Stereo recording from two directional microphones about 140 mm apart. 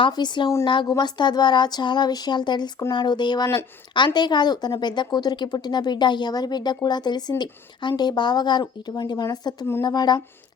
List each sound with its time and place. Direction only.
0.0 s a woman's voice: 35° left (ahead or behind)